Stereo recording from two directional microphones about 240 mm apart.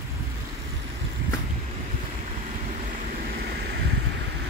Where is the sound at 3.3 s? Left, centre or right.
Right.